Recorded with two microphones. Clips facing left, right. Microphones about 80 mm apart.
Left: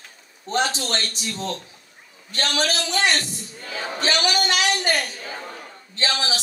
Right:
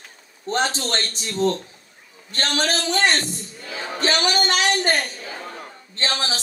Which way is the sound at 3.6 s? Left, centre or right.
Left.